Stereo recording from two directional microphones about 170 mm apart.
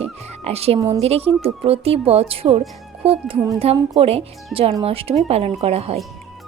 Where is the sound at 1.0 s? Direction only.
35° right (ahead or behind).